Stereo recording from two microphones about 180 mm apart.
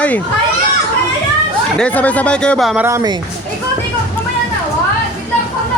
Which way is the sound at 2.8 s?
20° right (ahead or behind).